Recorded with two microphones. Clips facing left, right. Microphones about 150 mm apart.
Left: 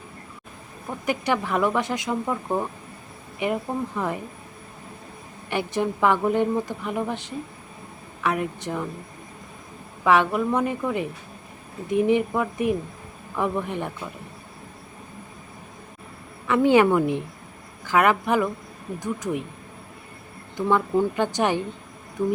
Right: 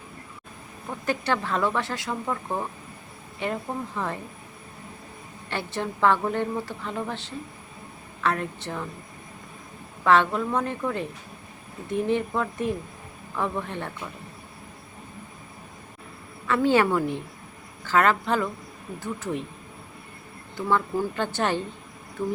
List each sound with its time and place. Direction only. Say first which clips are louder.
1.0 s a woman's voice: left 2 dB; 15° left (ahead or behind)
5.5 s a woman's voice: left 5 dB; 15° left (ahead or behind)
10.0 s a woman's voice: left 1 dB; 10° left (ahead or behind)
16.5 s a woman's voice: left 4 dB; 15° left (ahead or behind)
20.6 s a woman's voice: left 4 dB; 20° left (ahead or behind)